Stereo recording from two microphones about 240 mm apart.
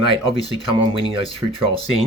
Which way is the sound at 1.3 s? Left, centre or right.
Right.